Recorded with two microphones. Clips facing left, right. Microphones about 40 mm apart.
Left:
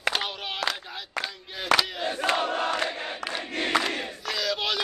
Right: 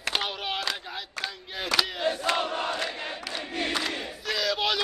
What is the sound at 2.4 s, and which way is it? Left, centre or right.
Crowd, left.